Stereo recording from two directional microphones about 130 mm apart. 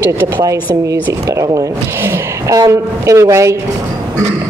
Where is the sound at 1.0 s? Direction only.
25° right (ahead or behind).